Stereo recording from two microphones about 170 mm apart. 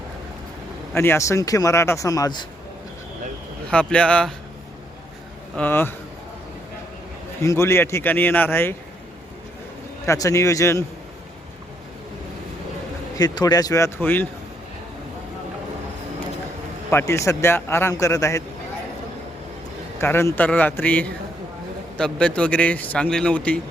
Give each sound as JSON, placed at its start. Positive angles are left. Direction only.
{"t": 0.9, "sound": "a man's voice", "side_deg": 15}
{"t": 3.7, "sound": "speech", "side_deg": 5}
{"t": 5.5, "sound": "a man's voice", "side_deg": 10}
{"t": 7.4, "sound": "a man's voice", "side_deg": 15}
{"t": 10.1, "sound": "a man's voice", "side_deg": 20}
{"t": 13.1, "sound": "a man's voice", "side_deg": 25}
{"t": 16.9, "sound": "a man's voice", "side_deg": 15}
{"t": 20.0, "sound": "a man's voice", "side_deg": 15}